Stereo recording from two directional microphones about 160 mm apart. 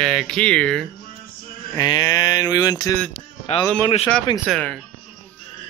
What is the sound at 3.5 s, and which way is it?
Speech, 40° left (ahead or behind).